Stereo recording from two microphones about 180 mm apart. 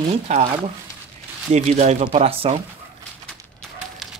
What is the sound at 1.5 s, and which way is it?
Speech, 40° right (ahead or behind).